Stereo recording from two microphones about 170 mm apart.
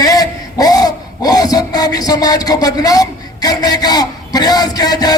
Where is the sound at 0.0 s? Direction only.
20° left (ahead or behind).